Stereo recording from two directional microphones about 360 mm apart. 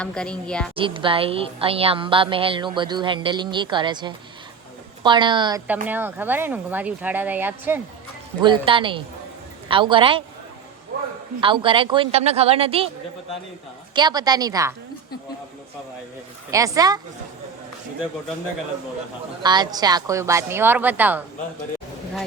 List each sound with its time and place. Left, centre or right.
0.0 s speech: centre
0.8 s a woman's voice: centre
11.3 s a woman's voice: centre
13.9 s a woman's voice: centre
16.5 s a woman's voice: centre
19.4 s a woman's voice: centre